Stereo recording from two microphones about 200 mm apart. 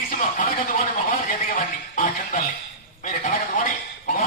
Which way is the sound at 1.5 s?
40° left (ahead or behind).